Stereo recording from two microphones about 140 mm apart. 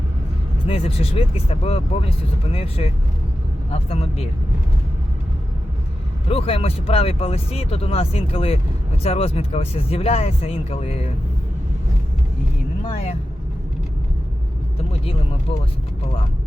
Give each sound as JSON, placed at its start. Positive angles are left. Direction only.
{"t": 0.7, "sound": "speech", "side_deg": 45}
{"t": 6.2, "sound": "speech", "side_deg": 45}
{"t": 12.8, "sound": "speech", "side_deg": 55}